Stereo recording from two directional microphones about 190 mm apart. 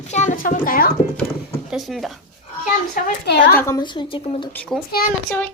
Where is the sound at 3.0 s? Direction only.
50° left (ahead or behind).